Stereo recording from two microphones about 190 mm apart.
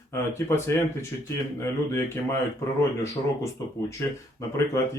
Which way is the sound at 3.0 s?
15° left (ahead or behind).